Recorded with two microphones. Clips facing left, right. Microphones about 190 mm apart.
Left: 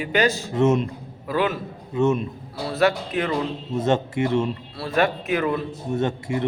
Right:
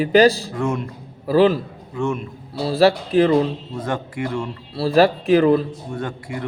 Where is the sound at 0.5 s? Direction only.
20° left (ahead or behind).